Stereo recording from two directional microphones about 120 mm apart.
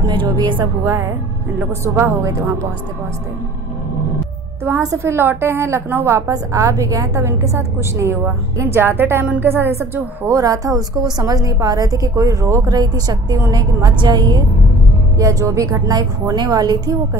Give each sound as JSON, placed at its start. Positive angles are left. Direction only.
{"t": 0.0, "sound": "a woman's voice", "side_deg": -40}
{"t": 0.6, "sound": "a woman's voice", "side_deg": -25}
{"t": 4.6, "sound": "a woman's voice", "side_deg": -20}